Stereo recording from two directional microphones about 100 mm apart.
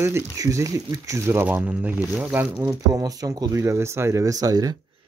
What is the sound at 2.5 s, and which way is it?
Speech, 30° right (ahead or behind).